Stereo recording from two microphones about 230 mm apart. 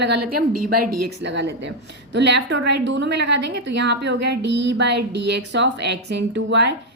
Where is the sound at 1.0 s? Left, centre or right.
Right.